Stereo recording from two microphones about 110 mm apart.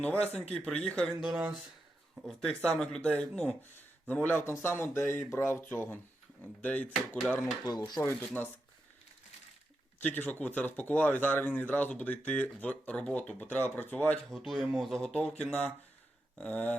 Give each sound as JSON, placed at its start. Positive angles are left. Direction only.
{"t": 0.0, "sound": "speech", "side_deg": 10}
{"t": 1.2, "sound": "speech", "side_deg": -10}
{"t": 2.2, "sound": "speech", "side_deg": 5}
{"t": 7.6, "sound": "speech", "side_deg": 35}
{"t": 8.0, "sound": "speech", "side_deg": 15}
{"t": 10.0, "sound": "speech", "side_deg": 15}
{"t": 14.3, "sound": "speech", "side_deg": -5}